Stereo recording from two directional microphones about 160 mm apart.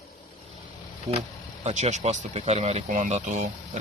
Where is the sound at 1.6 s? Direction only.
45° right (ahead or behind).